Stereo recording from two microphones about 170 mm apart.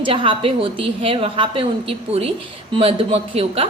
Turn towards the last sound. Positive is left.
turn(degrees=-35)  # may be behind; listen again after turning